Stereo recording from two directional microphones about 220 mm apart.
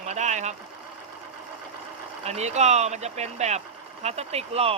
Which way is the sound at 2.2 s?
30° right (ahead or behind).